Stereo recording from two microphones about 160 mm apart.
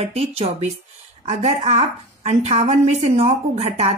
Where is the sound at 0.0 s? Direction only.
40° right (ahead or behind).